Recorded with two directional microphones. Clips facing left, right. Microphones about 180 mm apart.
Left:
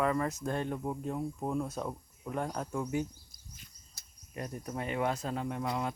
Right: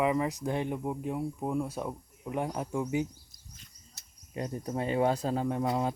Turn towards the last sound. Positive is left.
turn(degrees=-30)  # may be behind; listen again after turning